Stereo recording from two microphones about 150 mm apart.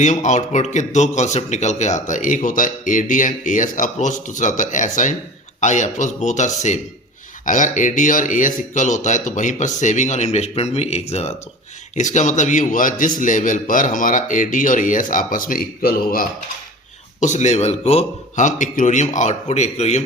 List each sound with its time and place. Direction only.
0.0 s a man's voice: 55° left (ahead or behind); by 16.2 s 80° left
17.2 s a man's voice: 55° left (ahead or behind)